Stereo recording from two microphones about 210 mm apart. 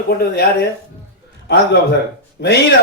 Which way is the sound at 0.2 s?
50° left (ahead or behind).